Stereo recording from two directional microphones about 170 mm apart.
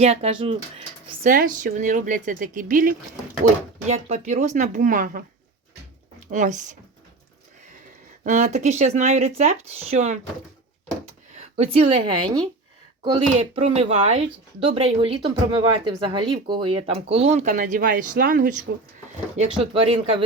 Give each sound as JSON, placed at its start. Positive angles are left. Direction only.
{"t": 0.0, "sound": "speech", "side_deg": -40}
{"t": 1.3, "sound": "speech", "side_deg": -50}
{"t": 3.8, "sound": "speech", "side_deg": -40}
{"t": 6.3, "sound": "speech", "side_deg": -45}
{"t": 8.2, "sound": "speech", "side_deg": -45}
{"t": 11.5, "sound": "speech", "side_deg": -35}
{"t": 19.5, "sound": "speech", "side_deg": -30}